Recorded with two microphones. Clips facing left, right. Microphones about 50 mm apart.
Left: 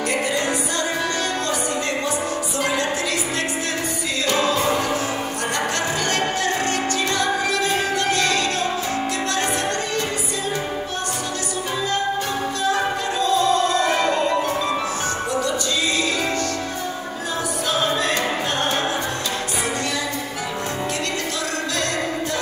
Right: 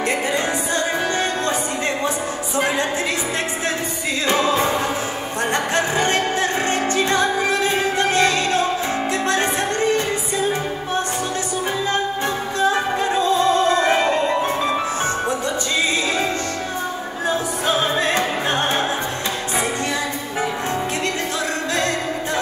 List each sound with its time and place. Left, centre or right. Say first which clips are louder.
2.6 s music: right 2 dB; right
4.3 s music: right 1 dB; right
12.5 s music: right 4 dB; right
17.6 s opera: right 2 dB; right